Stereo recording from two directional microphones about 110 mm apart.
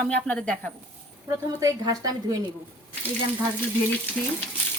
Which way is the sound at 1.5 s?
35° right (ahead or behind).